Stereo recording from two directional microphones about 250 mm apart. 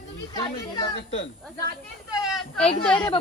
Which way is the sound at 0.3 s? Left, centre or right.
Centre.